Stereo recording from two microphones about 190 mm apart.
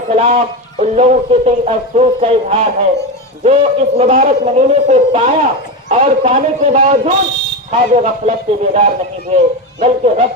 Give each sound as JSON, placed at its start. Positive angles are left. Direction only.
{"t": 0.1, "sound": "speech", "side_deg": -30}
{"t": 6.9, "sound": "speech", "side_deg": -45}